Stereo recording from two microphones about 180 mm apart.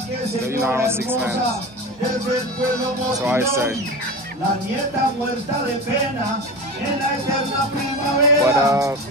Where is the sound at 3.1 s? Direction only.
15° right (ahead or behind).